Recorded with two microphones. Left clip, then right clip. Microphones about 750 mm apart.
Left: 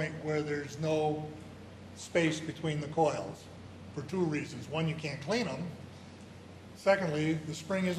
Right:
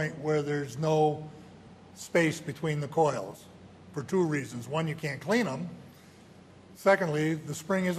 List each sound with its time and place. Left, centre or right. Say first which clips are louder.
0.0 s a man's voice: right 5 dB; right
6.8 s a man's voice: right 4 dB; right